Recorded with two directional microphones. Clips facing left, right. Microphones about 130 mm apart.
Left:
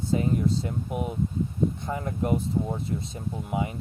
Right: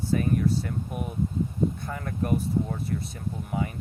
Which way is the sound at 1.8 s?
20° left (ahead or behind).